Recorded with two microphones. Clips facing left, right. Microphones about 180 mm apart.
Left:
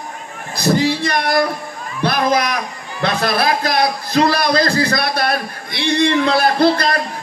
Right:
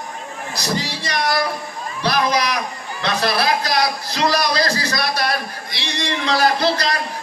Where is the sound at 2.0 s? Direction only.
50° left (ahead or behind).